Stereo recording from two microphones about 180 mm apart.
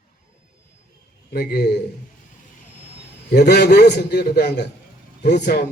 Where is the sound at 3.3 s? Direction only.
65° left (ahead or behind).